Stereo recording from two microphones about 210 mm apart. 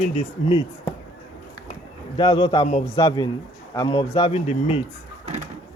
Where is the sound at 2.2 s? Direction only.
25° left (ahead or behind).